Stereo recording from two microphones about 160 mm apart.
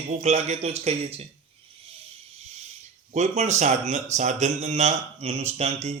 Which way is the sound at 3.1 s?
45° right (ahead or behind).